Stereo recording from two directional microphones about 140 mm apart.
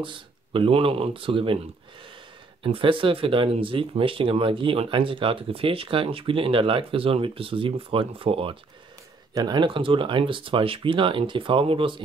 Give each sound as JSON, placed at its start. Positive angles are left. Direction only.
{"t": 0.0, "sound": "speech", "side_deg": -35}
{"t": 2.6, "sound": "speech", "side_deg": -40}
{"t": 9.3, "sound": "speech", "side_deg": -30}